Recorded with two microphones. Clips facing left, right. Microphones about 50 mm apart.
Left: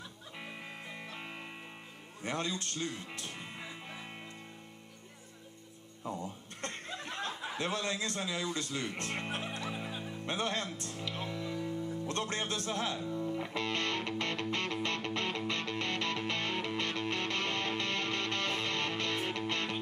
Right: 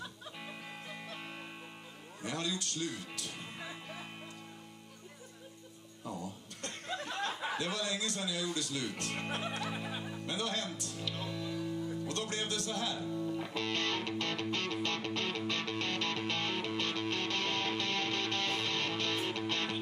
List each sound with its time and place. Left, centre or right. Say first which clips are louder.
2.2 s speech: left 1 dB; left
6.0 s chuckle: left 2 dB; left
7.5 s speech: left 1 dB; left
10.2 s music: left 3 dB; left